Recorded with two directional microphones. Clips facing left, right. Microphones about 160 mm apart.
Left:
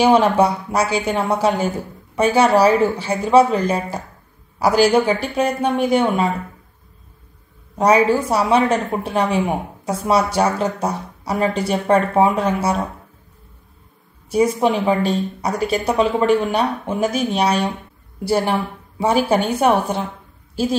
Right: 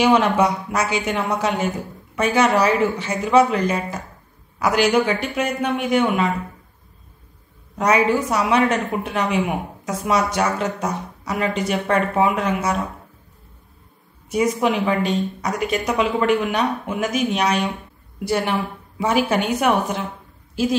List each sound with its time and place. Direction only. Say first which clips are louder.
0.0 s a woman's voice: left 3 dB; 30° left (ahead or behind)
7.7 s a woman's voice: left 3 dB; 30° left (ahead or behind)
14.3 s a woman's voice: left 3 dB; 30° left (ahead or behind)